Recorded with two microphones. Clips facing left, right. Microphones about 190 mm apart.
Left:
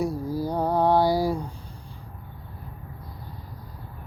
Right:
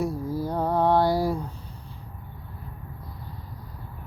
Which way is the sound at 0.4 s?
Centre (ahead or behind).